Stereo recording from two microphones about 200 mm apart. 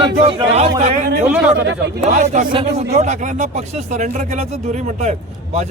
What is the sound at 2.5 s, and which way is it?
Speech, 25° right (ahead or behind).